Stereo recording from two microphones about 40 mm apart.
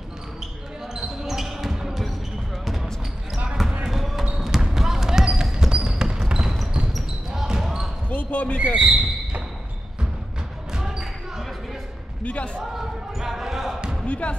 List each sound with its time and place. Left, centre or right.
1.0 s basketball bounce: centre
4.6 s a sound: centre
5.2 s basketball bounce: centre
8.1 s basketball bounce: left
8.7 s speech: centre
12.2 s a sound: left
12.7 s basketball bounce: centre
14.0 s music: left